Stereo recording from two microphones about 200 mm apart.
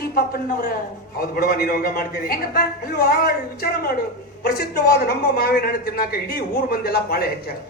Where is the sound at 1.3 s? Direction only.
50° left (ahead or behind).